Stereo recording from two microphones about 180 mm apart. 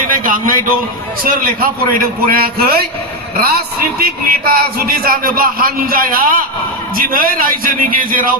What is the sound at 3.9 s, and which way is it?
A man's voice, 55° right (ahead or behind).